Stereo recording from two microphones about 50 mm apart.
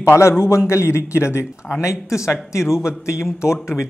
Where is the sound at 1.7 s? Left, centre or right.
Left.